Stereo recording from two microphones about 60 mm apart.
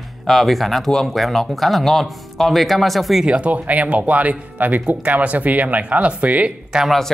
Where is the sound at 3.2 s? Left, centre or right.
Right.